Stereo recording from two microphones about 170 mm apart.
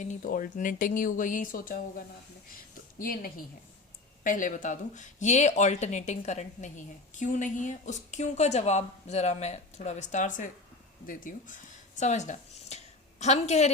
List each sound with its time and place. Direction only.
0.0 s a woman's voice: 50° left (ahead or behind)